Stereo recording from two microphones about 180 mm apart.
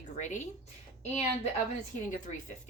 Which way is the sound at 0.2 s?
40° left (ahead or behind).